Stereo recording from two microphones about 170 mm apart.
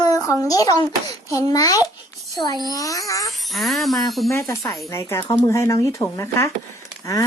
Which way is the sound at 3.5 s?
Centre (ahead or behind).